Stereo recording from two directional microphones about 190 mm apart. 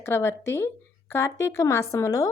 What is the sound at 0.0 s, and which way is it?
A woman's voice, 15° left (ahead or behind).